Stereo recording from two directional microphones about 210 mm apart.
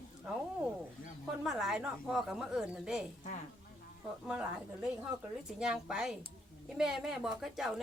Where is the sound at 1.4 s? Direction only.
Centre (ahead or behind).